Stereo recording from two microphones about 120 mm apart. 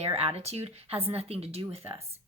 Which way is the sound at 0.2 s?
55° right (ahead or behind).